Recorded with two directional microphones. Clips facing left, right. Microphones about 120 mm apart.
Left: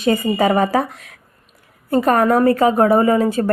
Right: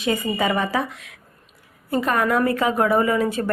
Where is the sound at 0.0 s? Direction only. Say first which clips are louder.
Left 6 dB; 40° left (ahead or behind).